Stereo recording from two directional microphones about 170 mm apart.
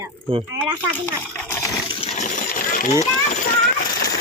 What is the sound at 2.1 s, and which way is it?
Coin, 50° left (ahead or behind).